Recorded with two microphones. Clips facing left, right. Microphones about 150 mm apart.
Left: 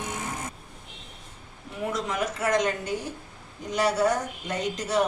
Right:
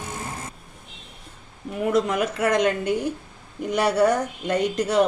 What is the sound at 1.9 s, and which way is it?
A woman's voice, 60° right (ahead or behind).